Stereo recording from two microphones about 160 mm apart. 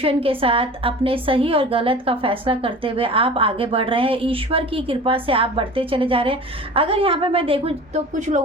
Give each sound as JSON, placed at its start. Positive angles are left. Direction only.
{"t": 0.0, "sound": "a woman's voice", "side_deg": -35}